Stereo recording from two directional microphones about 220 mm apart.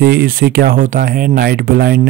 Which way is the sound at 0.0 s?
45° right (ahead or behind).